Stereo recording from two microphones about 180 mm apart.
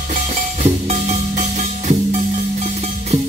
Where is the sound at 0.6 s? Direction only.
40° right (ahead or behind).